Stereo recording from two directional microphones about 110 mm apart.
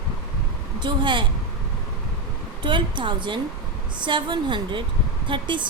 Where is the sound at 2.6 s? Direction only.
45° right (ahead or behind).